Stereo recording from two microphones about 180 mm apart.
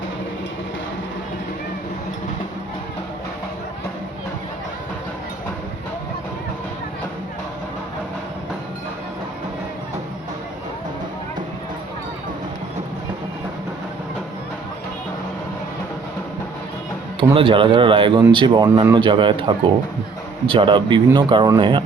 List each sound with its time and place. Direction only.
17.2 s speech: 30° right (ahead or behind)